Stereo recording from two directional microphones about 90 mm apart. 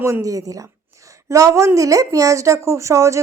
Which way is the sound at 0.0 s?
35° right (ahead or behind).